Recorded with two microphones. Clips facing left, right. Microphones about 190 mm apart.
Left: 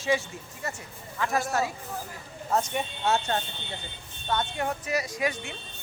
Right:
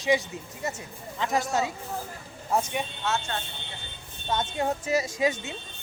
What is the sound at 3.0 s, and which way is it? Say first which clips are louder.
Speech: left 6 dB; 35° left (ahead or behind).